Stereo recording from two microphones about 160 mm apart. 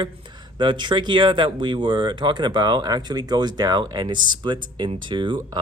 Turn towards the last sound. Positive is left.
turn(degrees=-30)  # may be behind; listen again after turning